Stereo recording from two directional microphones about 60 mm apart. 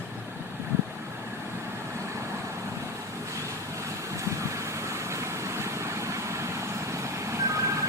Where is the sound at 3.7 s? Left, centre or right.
Right.